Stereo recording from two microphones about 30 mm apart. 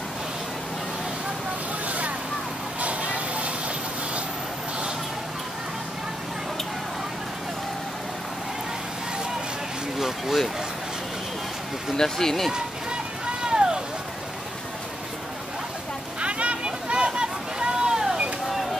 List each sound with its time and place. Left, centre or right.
1.9 s vehicle: right
2.8 s a sound: right
9.9 s vehicle: centre
11.9 s speech: centre
13.4 s run: right
16.2 s boat: right